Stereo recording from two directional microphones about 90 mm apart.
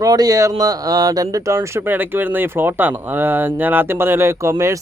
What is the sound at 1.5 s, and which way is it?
Speech, 30° right (ahead or behind).